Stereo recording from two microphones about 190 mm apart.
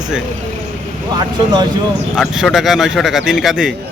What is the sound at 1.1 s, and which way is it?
Speech, 20° right (ahead or behind).